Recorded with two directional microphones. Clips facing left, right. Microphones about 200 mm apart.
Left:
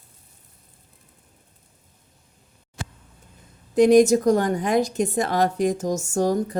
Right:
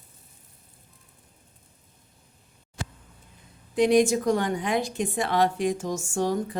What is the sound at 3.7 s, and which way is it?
A woman's voice, 45° left (ahead or behind).